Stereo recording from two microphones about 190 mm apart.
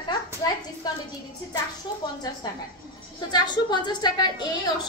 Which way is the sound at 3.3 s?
25° left (ahead or behind).